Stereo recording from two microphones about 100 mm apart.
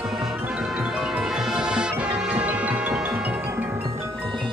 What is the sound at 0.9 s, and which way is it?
Music, 5° right (ahead or behind).